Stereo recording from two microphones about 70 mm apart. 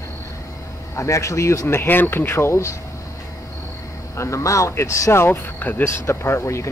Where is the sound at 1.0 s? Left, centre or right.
Left.